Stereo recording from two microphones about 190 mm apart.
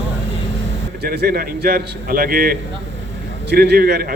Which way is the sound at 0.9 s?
60° right (ahead or behind).